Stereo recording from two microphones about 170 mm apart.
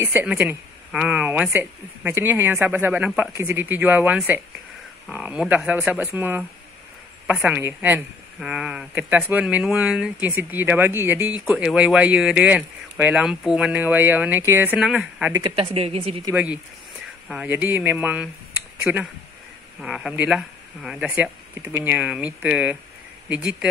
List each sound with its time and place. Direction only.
0.0 s speech: 10° right (ahead or behind)
15.5 s a woman's voice: 35° right (ahead or behind)
16.3 s speech: 10° right (ahead or behind)